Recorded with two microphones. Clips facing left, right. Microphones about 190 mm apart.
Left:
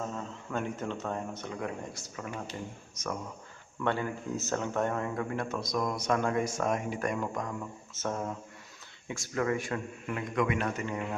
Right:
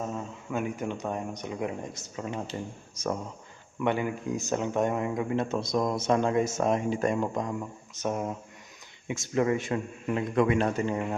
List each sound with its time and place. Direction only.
0.1 s speech: 10° right (ahead or behind); by 3.2 s 30° right (ahead or behind)
3.8 s speech: 15° right (ahead or behind); by 11.0 s 30° right (ahead or behind)